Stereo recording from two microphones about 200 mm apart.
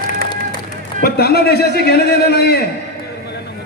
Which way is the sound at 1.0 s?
50° left (ahead or behind).